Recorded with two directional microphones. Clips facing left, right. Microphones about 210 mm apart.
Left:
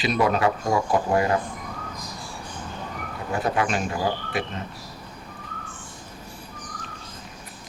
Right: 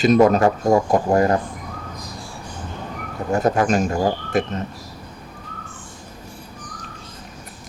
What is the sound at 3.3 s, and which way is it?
Speech, 45° right (ahead or behind).